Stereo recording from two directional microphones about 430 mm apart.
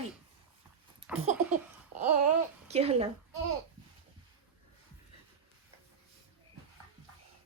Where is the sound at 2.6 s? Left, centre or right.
Centre.